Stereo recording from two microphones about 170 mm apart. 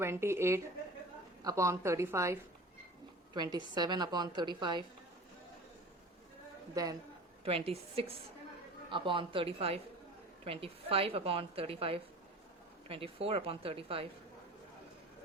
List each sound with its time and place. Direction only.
0.0 s a woman's voice: 15° right (ahead or behind)
7.4 s a woman's voice: 35° right (ahead or behind)